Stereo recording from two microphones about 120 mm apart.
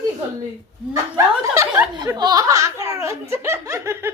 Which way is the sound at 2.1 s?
35° right (ahead or behind).